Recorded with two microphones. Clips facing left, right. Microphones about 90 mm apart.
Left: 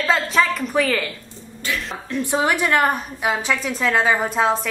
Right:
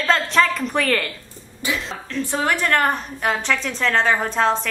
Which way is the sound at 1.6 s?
20° right (ahead or behind).